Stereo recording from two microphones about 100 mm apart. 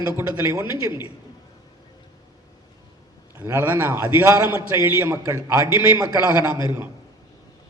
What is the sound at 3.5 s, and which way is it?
A man's voice, 20° right (ahead or behind).